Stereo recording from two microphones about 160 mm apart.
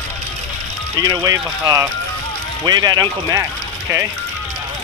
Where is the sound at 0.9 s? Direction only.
25° right (ahead or behind).